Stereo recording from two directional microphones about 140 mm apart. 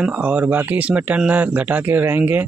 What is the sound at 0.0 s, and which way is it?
Speech, 10° right (ahead or behind).